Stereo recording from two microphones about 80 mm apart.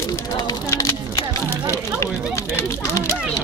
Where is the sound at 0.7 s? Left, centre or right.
Left.